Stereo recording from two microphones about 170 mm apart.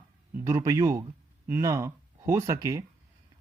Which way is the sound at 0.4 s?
20° right (ahead or behind).